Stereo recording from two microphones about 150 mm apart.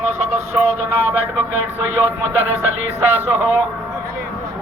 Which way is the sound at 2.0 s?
15° right (ahead or behind).